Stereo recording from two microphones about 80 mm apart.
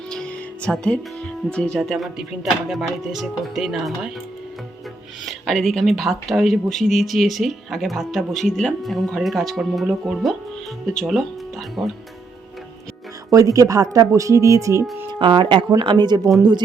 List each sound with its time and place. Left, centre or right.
0.1 s music: centre
1.5 s speech: centre
1.8 s speech: centre
5.2 s speech: centre
13.3 s speech: right
15.2 s speech: right
15.8 s speech: right